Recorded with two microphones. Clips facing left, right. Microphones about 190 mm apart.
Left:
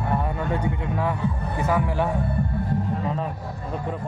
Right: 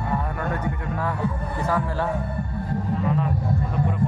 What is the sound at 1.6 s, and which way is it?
Speech, 10° left (ahead or behind).